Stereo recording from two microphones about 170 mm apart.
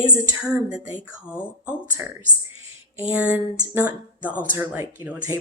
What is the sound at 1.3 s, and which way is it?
Speech, 10° left (ahead or behind).